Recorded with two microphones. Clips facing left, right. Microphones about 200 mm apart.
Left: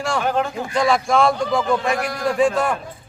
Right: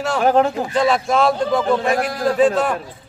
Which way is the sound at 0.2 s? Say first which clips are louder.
Right 9 dB; 45° right (ahead or behind).